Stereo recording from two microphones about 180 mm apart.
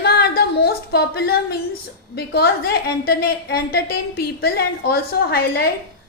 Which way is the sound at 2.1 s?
65° left (ahead or behind).